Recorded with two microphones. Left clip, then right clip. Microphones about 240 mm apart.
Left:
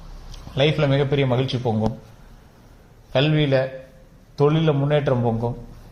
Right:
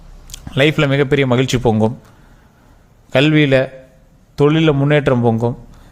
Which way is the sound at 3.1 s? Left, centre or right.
Right.